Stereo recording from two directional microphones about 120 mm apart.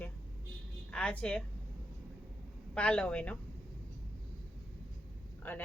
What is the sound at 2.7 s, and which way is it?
Speech, 10° left (ahead or behind).